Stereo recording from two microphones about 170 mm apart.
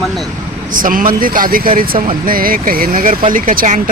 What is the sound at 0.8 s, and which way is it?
Speech, 55° right (ahead or behind).